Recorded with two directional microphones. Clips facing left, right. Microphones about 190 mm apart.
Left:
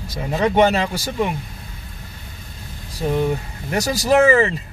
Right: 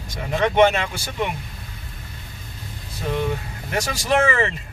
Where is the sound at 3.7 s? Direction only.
40° left (ahead or behind).